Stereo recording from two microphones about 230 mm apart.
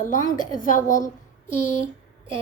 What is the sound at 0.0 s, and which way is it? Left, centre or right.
A woman's voice, left.